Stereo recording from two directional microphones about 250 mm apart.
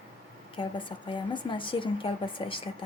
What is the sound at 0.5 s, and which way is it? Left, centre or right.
A woman's voice, centre.